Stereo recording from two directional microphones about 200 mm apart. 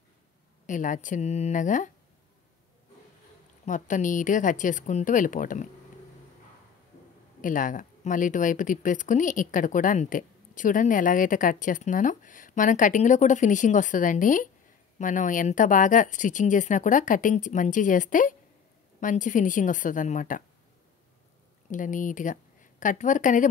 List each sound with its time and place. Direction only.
0.7 s speech: 40° left (ahead or behind)
3.6 s speech: 40° left (ahead or behind)
7.4 s speech: 40° left (ahead or behind)
21.6 s a woman's voice: 40° left (ahead or behind)